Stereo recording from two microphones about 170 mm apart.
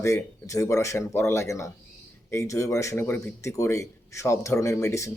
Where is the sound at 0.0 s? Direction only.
20° left (ahead or behind).